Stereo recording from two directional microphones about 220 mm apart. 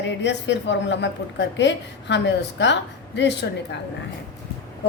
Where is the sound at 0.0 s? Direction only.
55° left (ahead or behind).